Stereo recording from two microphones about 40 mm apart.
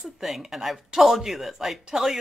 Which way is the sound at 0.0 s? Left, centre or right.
Centre.